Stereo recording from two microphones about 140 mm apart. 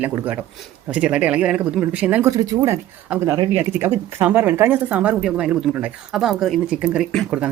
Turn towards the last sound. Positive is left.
turn(degrees=-5)  # may be behind; listen again after turning